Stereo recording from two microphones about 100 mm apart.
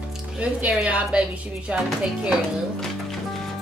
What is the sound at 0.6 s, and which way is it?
Speech, 10° right (ahead or behind).